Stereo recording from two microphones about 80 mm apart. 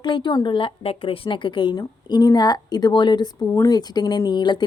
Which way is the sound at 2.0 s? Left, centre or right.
Left.